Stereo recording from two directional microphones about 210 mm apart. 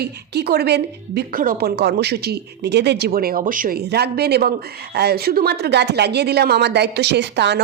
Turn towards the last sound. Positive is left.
turn(degrees=-55)  # may be behind; listen again after turning